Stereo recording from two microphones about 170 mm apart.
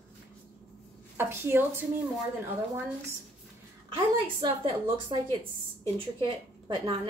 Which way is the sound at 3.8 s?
30° right (ahead or behind).